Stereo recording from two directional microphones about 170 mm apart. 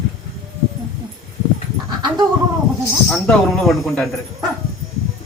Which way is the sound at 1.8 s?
25° right (ahead or behind).